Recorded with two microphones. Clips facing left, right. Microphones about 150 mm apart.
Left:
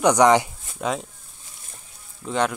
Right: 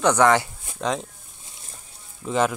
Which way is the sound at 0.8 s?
5° left (ahead or behind).